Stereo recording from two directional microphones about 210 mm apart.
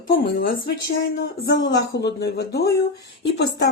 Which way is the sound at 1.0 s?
55° left (ahead or behind).